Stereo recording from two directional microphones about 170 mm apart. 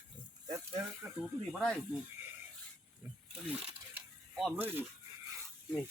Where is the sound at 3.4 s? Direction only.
10° right (ahead or behind).